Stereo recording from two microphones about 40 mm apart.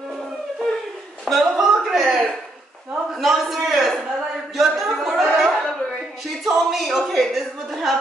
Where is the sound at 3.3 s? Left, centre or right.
Centre.